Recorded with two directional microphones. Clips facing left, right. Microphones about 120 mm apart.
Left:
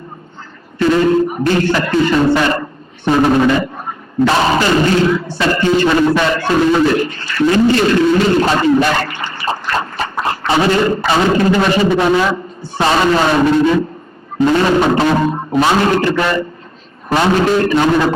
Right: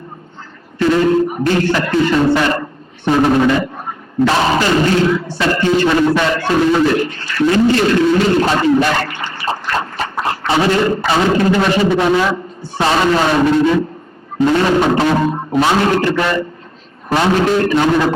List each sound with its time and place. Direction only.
0.8 s a man's voice: 25° left (ahead or behind)